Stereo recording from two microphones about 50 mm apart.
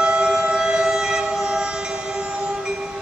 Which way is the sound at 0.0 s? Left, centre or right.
Centre.